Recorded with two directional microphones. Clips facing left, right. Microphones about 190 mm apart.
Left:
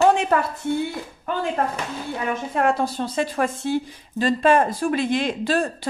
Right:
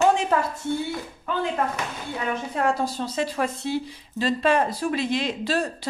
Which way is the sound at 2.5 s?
60° left (ahead or behind).